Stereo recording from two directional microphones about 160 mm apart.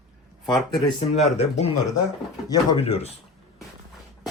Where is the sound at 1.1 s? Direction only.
45° left (ahead or behind).